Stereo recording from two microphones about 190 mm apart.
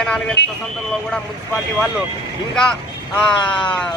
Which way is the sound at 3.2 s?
5° left (ahead or behind).